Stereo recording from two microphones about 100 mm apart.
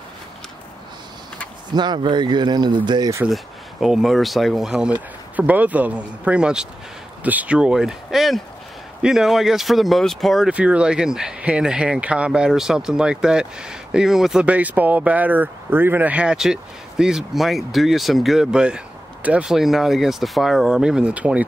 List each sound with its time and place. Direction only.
1.7 s speech: 45° right (ahead or behind)
3.8 s speech: 5° right (ahead or behind)
10.5 s speech: 10° right (ahead or behind)
14.4 s speech: 15° right (ahead or behind)